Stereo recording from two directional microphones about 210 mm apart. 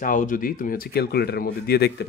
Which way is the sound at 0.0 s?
40° left (ahead or behind).